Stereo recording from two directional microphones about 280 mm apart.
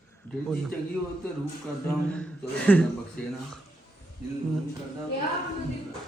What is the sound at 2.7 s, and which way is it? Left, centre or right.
Speech, centre.